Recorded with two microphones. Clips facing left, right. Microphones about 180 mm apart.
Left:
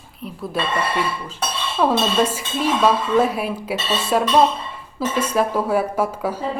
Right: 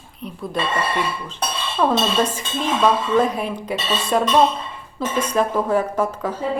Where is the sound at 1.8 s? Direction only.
5° left (ahead or behind).